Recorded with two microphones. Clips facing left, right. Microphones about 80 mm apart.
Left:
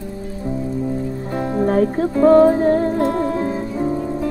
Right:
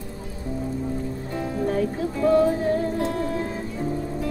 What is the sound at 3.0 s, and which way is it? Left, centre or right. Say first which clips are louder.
Music: left 7 dB; left.